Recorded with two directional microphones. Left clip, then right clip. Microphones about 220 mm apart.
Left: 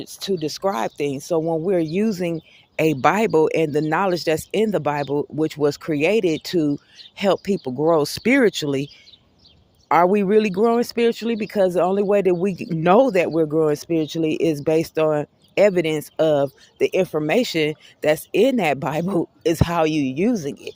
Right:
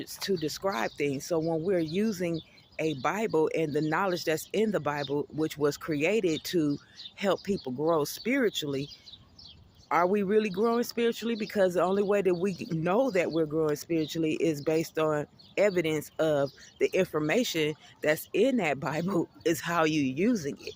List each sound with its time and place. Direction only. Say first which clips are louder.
0.0 s speech: left 6 dB; 25° left (ahead or behind)
9.9 s speech: left 9 dB; 35° left (ahead or behind)